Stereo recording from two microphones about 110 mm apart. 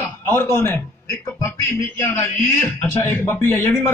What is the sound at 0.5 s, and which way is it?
Speech, 20° left (ahead or behind).